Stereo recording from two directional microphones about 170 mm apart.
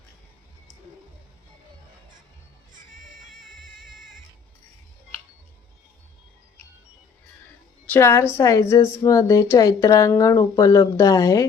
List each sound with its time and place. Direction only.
7.9 s a woman's voice: 15° left (ahead or behind)